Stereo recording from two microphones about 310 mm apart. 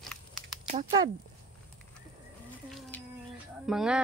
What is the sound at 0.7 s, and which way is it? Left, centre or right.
Speech, centre.